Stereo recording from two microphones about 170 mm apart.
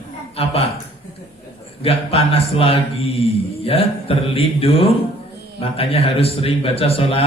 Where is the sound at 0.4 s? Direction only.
35° left (ahead or behind).